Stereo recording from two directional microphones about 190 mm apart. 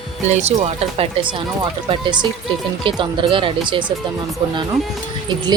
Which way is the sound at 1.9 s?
25° right (ahead or behind).